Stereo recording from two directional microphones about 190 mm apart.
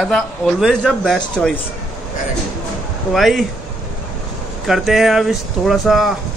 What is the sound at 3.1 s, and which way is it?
Speech, centre (ahead or behind).